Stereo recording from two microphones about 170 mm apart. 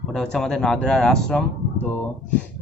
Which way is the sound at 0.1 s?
Centre (ahead or behind).